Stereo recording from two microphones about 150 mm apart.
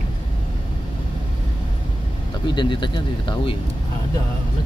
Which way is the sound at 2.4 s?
30° left (ahead or behind).